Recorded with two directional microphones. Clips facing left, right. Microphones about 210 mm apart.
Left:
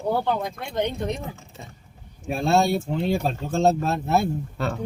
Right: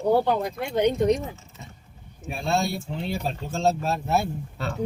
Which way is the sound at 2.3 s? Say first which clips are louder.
Left 5 dB; 50° left (ahead or behind).